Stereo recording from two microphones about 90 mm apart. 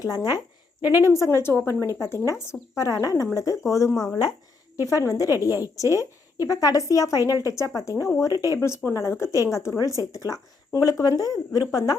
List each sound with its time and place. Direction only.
0.0 s speech: 40° left (ahead or behind)
0.8 s a woman's voice: 20° right (ahead or behind)
1.0 s speech: 35° left (ahead or behind)
8.6 s speech: 30° left (ahead or behind)